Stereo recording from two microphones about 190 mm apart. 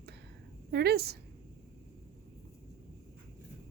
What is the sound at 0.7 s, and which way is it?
Speech, 55° right (ahead or behind).